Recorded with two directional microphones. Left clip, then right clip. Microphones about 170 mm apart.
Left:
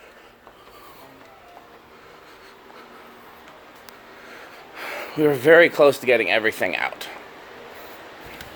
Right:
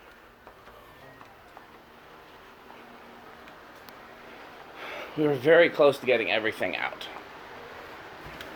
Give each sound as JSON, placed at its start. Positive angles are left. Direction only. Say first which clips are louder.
{"t": 4.8, "sound": "speech", "louder": "left 7 dB", "side_deg": 50}